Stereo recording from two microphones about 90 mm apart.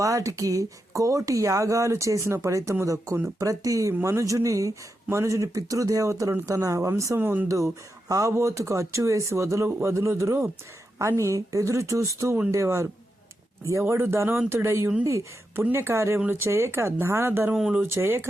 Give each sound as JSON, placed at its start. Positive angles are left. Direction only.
{"t": 0.0, "sound": "speech", "side_deg": -35}
{"t": 7.2, "sound": "speech", "side_deg": -20}
{"t": 7.4, "sound": "speech", "side_deg": -35}
{"t": 17.5, "sound": "speech", "side_deg": -10}
{"t": 17.9, "sound": "speech", "side_deg": -25}